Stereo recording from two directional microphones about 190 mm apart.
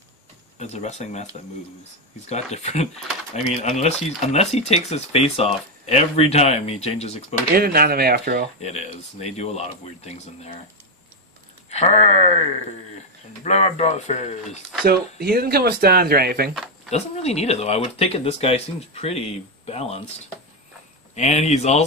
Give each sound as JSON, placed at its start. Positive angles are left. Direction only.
{"t": 0.6, "sound": "speech", "side_deg": 35}
{"t": 2.2, "sound": "speech", "side_deg": 35}
{"t": 7.5, "sound": "speech", "side_deg": -50}
{"t": 8.5, "sound": "speech", "side_deg": 35}
{"t": 11.7, "sound": "speech", "side_deg": 35}
{"t": 14.9, "sound": "speech", "side_deg": -55}
{"t": 16.9, "sound": "speech", "side_deg": 35}
{"t": 21.1, "sound": "speech", "side_deg": 35}